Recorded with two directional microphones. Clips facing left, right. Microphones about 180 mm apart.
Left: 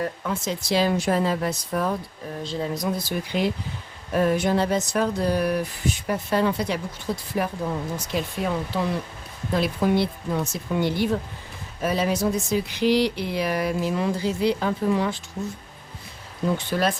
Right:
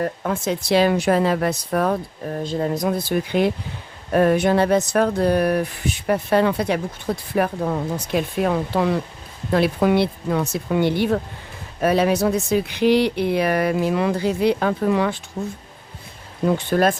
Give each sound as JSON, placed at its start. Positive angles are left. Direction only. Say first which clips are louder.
{"t": 0.0, "sound": "speech", "louder": "right 4 dB", "side_deg": -50}
{"t": 16.5, "sound": "speech", "louder": "right 5 dB", "side_deg": -50}